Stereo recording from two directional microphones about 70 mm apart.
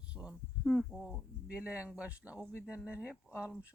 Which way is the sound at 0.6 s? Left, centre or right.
Centre.